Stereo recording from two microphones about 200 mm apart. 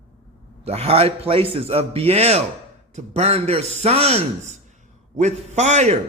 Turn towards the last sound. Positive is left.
turn(degrees=-35)  # may be behind; listen again after turning